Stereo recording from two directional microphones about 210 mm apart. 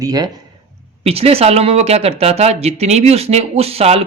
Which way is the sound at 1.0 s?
30° right (ahead or behind).